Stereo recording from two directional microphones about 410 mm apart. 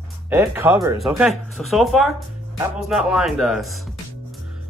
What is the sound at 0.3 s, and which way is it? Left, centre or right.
Speech, centre.